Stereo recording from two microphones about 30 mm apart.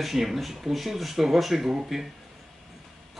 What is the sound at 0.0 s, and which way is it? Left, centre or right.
Speech, centre.